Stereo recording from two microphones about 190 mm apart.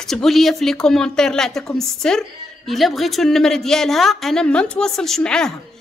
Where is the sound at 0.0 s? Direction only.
Centre (ahead or behind).